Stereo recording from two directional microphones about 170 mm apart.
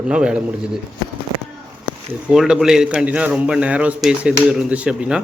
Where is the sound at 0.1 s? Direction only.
5° right (ahead or behind).